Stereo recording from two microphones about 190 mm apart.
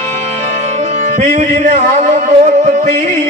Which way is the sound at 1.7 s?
35° right (ahead or behind).